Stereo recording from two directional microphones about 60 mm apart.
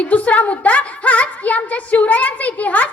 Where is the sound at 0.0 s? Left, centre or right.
Left.